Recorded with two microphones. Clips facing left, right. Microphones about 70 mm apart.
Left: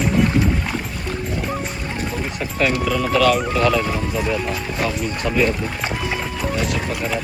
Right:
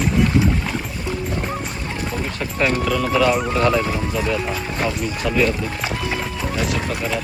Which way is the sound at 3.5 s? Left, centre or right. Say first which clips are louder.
Even; right.